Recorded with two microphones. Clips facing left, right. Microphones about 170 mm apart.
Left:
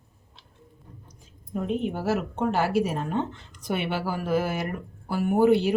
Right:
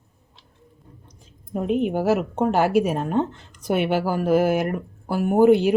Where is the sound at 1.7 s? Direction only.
65° right (ahead or behind).